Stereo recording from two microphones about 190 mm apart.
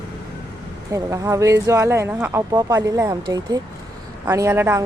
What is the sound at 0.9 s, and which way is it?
Speech, 15° right (ahead or behind).